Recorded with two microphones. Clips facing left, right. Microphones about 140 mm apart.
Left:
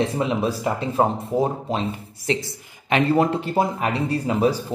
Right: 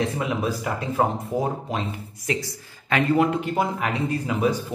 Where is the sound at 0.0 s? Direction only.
25° left (ahead or behind).